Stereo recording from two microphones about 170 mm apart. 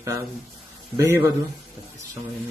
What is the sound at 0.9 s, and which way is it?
Speech, 15° right (ahead or behind).